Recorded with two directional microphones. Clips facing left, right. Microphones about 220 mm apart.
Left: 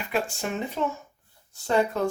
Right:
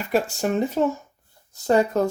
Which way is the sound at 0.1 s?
40° right (ahead or behind).